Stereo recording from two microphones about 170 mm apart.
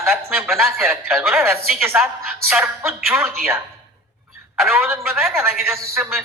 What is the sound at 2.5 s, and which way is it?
Speech, centre (ahead or behind).